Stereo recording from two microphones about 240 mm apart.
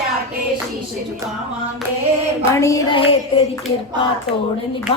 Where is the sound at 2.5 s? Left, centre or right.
Centre.